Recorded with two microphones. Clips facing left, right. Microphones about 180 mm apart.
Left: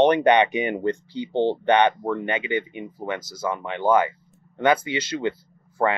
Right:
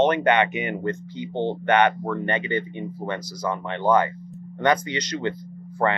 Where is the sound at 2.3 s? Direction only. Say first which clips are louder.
Even; centre (ahead or behind).